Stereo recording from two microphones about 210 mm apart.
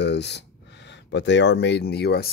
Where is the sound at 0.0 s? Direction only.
55° left (ahead or behind).